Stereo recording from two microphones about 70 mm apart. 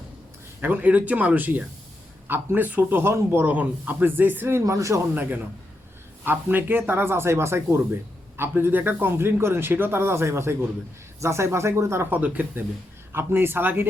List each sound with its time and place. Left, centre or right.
0.6 s a man's voice: right
3.5 s a man's voice: right
4.6 s speech: right
5.1 s a man's voice: right
12.1 s a man's voice: right
13.1 s speech: right